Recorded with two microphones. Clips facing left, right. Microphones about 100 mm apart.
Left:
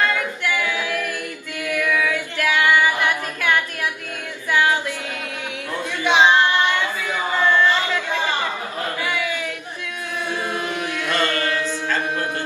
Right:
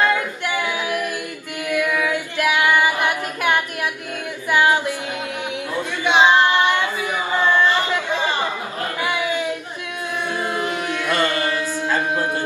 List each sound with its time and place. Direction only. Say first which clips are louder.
0.0 s singing: right 2 dB; 20° right (ahead or behind)
1.7 s female singing: right 1 dB; 20° right (ahead or behind)
4.5 s a sound: right 2 dB; 20° right (ahead or behind)
6.1 s child singing: right 1 dB; 15° right (ahead or behind)
9.0 s a sound: right 5 dB; 20° right (ahead or behind)
10.5 s carnatic music: right 2 dB; 20° right (ahead or behind)